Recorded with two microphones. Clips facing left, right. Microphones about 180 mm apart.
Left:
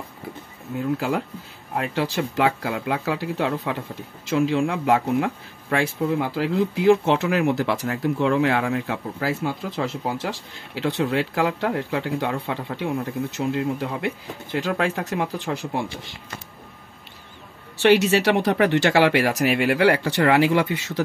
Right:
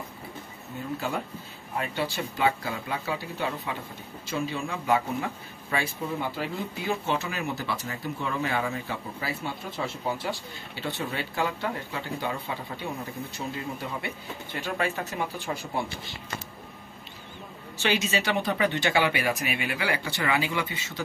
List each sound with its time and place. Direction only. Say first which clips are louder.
0.7 s speech: left 8 dB; 85° left
4.3 s speech: left 10 dB; 90° left
17.7 s speech: left 10 dB; 70° left (ahead or behind)